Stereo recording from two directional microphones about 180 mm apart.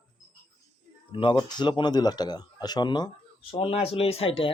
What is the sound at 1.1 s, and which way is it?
Speech, 25° left (ahead or behind).